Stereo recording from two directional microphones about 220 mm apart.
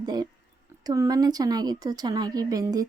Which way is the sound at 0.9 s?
15° right (ahead or behind).